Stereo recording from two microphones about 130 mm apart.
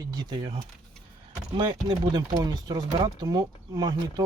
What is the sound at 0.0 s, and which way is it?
Speech, 35° right (ahead or behind).